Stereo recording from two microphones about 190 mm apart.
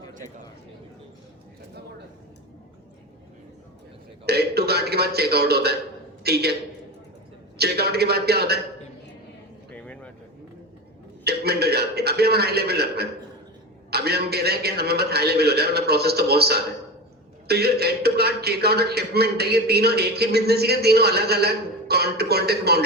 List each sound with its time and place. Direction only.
4.3 s a man's voice: 55° right (ahead or behind)
7.6 s a man's voice: 55° right (ahead or behind)
9.7 s a sound: 5° left (ahead or behind)
11.2 s a man's voice: 55° right (ahead or behind)